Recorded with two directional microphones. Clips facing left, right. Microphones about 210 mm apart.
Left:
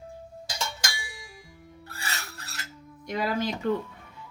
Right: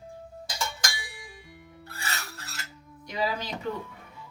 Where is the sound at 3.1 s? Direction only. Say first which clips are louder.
Left 3 dB; 50° left (ahead or behind).